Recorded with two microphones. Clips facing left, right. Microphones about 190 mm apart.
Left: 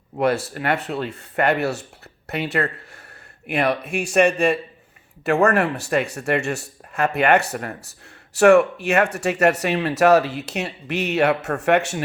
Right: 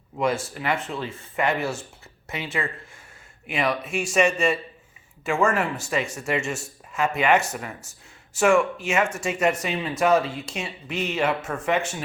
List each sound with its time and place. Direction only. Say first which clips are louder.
0.2 s speech: left 4 dB; 65° left (ahead or behind)